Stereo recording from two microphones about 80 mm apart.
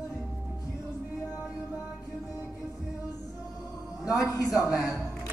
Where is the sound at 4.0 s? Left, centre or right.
Left.